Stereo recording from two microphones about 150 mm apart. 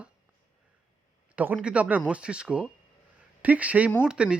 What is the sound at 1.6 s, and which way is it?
Speech, 10° right (ahead or behind).